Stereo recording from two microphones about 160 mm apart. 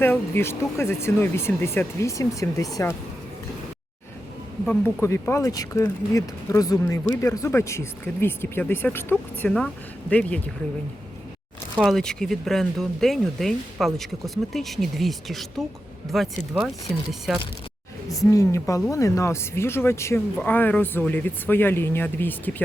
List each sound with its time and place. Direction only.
0.0 s speech: 15° left (ahead or behind)
4.6 s speech: 10° left (ahead or behind)
11.8 s speech: centre (ahead or behind)
18.3 s speech: 20° left (ahead or behind)